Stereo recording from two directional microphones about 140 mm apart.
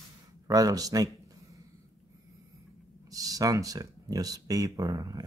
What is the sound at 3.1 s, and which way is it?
Speech, 25° right (ahead or behind).